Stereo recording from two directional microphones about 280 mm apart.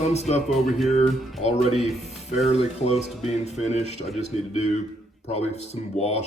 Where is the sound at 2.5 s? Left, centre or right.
Left.